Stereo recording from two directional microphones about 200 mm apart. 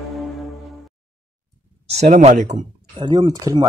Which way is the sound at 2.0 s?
35° right (ahead or behind).